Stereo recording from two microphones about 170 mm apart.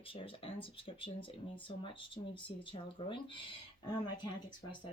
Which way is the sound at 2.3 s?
30° left (ahead or behind).